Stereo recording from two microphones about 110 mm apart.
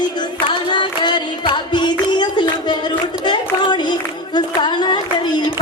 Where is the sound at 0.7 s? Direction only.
45° left (ahead or behind).